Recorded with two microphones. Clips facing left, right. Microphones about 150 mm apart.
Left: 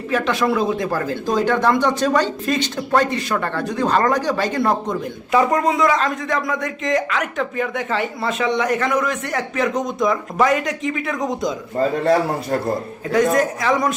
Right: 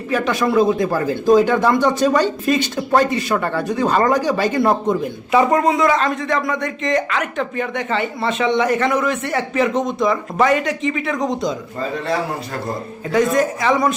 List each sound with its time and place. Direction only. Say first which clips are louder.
0.1 s speech: right 1 dB; centre (ahead or behind)
11.8 s a man's voice: left 6 dB; 45° left (ahead or behind)
13.1 s speech: even; centre (ahead or behind)